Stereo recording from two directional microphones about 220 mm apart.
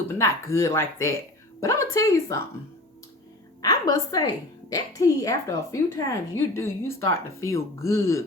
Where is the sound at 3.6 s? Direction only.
15° left (ahead or behind).